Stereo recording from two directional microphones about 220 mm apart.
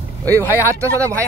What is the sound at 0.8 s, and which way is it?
Speech, 15° right (ahead or behind).